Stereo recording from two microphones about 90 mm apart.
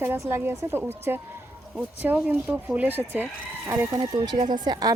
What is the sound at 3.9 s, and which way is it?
Speech, 45° right (ahead or behind).